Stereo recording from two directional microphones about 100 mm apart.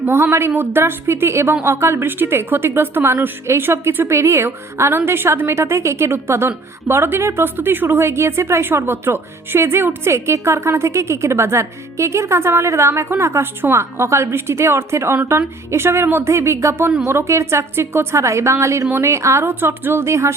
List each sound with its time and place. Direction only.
0.0 s speech: 20° right (ahead or behind)